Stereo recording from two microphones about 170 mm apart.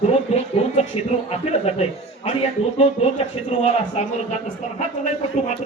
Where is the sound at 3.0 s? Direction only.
35° left (ahead or behind).